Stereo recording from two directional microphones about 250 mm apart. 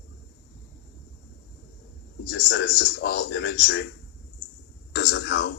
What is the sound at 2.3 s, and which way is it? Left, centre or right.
A man's voice, left.